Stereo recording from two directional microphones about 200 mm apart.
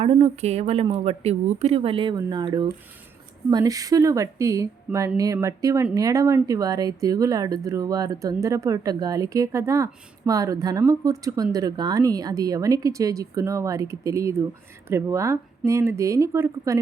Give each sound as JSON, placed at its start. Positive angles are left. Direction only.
{"t": 0.0, "sound": "speech", "side_deg": -30}